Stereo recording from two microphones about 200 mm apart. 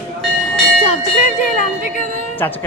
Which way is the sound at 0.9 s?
40° left (ahead or behind).